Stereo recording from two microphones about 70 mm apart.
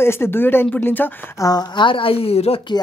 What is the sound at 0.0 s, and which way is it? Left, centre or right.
Speech, left.